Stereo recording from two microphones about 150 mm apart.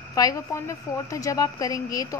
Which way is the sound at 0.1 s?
20° left (ahead or behind).